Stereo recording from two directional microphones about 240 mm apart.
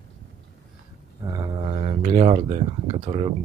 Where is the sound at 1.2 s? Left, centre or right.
Centre.